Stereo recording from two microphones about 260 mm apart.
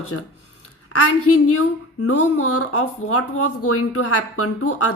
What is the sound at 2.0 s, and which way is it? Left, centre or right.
Speech, left.